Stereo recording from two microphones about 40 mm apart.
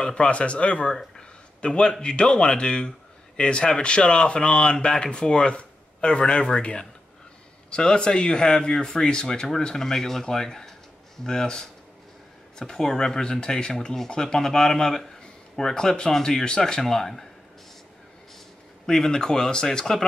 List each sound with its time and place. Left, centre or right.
0.0 s speech: left; by 17.3 s centre
18.9 s speech: centre